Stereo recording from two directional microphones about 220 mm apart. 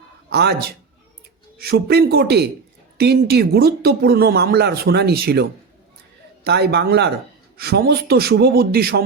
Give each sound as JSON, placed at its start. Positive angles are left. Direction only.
{"t": 0.3, "sound": "speech", "side_deg": -50}
{"t": 1.5, "sound": "speech", "side_deg": -45}